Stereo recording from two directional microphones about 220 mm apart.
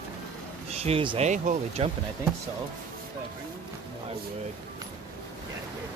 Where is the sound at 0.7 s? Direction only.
25° right (ahead or behind).